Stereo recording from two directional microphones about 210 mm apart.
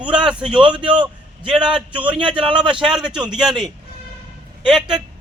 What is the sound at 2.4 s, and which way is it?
Speech, 25° right (ahead or behind).